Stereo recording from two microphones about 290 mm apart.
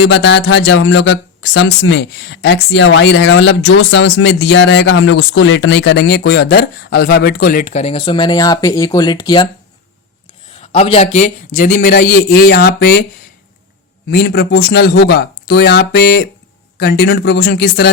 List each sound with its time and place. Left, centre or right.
0.0 s speech: left; by 9.5 s centre
10.6 s a man's voice: centre
14.1 s speech: left